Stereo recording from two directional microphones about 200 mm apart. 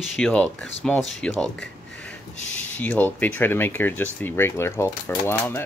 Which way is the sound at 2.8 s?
10° left (ahead or behind).